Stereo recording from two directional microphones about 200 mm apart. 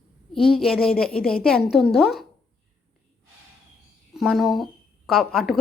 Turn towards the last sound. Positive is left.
turn(degrees=0)  # may be behind; listen again after turning